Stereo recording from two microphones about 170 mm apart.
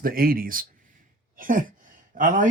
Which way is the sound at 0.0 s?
60° right (ahead or behind).